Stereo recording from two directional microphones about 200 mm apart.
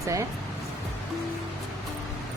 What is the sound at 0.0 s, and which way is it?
Speech, 15° right (ahead or behind).